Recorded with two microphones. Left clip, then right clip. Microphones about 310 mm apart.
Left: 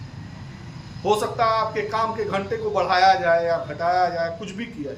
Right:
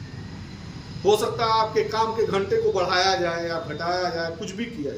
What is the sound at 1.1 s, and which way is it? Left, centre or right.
Speech, centre.